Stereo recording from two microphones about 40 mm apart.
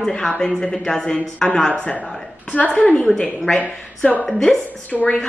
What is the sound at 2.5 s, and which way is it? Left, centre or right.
Speech, left.